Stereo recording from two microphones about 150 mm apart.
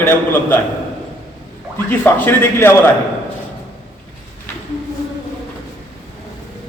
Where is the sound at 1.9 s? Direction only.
10° left (ahead or behind).